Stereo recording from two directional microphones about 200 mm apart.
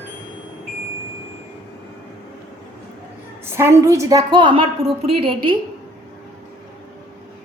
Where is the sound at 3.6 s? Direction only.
15° right (ahead or behind).